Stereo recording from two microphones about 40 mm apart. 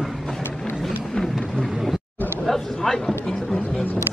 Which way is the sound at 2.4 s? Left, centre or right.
Centre.